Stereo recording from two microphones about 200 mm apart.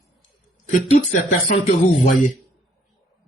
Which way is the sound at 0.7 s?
40° left (ahead or behind).